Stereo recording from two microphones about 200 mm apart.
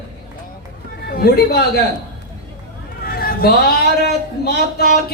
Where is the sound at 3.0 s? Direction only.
50° left (ahead or behind).